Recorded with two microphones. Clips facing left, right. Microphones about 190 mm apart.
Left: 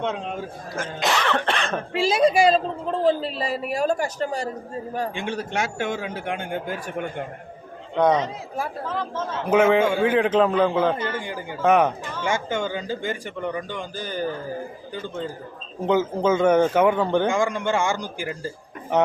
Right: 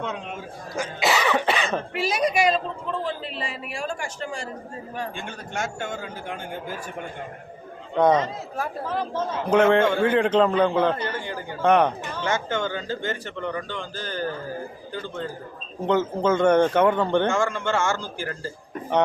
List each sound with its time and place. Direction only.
0.8 s a man's voice: 5° right (ahead or behind)
1.9 s a woman's voice: 30° left (ahead or behind)
5.1 s a man's voice: 80° left
7.9 s a man's voice: centre (ahead or behind)
8.2 s a man's voice: 10° left (ahead or behind)
8.9 s speech: 15° right (ahead or behind)
9.5 s a man's voice: 5° left (ahead or behind)
11.2 s a man's voice: 15° left (ahead or behind)
15.9 s a man's voice: 10° left (ahead or behind)